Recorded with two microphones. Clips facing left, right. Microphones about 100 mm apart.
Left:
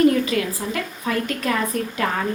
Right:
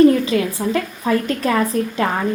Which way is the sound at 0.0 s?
30° right (ahead or behind).